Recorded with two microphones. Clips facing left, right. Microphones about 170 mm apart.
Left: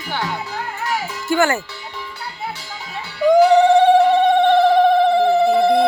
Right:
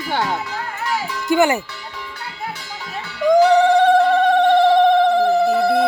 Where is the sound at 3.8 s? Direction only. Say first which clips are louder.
Left 1 dB; 10° left (ahead or behind).